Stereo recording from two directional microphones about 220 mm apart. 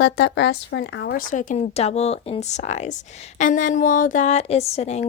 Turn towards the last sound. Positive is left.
turn(degrees=30)  # may be behind; listen again after turning